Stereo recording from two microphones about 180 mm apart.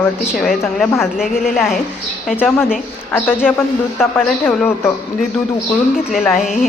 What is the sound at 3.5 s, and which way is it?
Speech, 10° left (ahead or behind).